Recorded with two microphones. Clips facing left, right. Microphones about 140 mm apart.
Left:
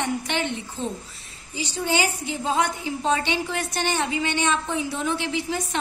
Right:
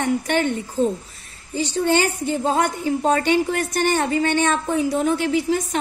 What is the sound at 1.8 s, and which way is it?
A woman's voice, 50° right (ahead or behind).